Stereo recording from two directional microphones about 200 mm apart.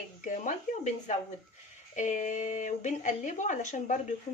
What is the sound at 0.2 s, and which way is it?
Speech, 40° left (ahead or behind).